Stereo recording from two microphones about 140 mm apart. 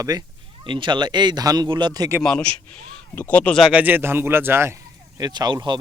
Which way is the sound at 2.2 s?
5° left (ahead or behind).